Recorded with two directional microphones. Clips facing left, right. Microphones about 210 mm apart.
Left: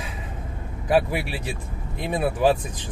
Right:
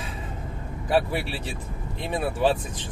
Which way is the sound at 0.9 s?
10° left (ahead or behind).